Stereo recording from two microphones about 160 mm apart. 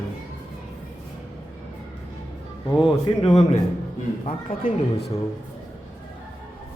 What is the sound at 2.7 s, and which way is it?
Speech, 35° left (ahead or behind).